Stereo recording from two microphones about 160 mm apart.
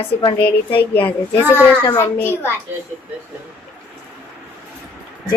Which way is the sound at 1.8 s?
25° left (ahead or behind).